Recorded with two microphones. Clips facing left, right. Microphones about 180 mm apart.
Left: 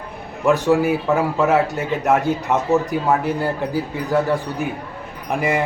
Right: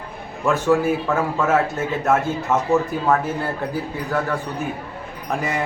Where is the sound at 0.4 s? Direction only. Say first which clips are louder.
Left 2 dB; 15° left (ahead or behind).